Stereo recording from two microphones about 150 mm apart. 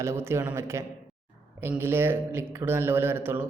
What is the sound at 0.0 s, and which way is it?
A man's voice, 20° right (ahead or behind).